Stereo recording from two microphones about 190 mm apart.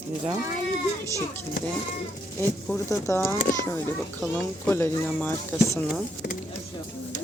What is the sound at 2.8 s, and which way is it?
Speech, 15° left (ahead or behind).